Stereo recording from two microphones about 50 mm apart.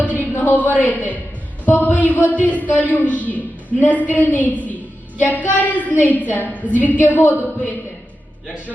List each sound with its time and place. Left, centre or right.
0.2 s a sound: left
0.6 s a woman's voice: left
2.1 s speech: right
2.4 s a woman's voice: left